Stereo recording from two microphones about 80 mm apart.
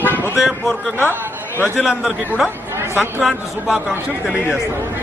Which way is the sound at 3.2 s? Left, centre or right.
Centre.